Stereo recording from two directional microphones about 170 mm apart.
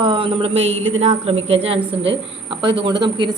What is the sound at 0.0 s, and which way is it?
A woman's voice, 30° right (ahead or behind).